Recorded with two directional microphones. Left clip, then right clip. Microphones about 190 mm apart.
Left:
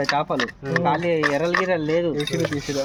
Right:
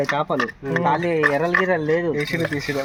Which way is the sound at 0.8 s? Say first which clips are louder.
Right 2 dB; 30° right (ahead or behind).